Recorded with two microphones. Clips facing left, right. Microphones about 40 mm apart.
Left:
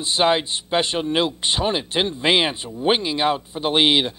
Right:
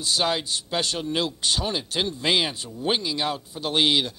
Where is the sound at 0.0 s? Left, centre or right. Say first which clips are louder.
Left 6 dB; left.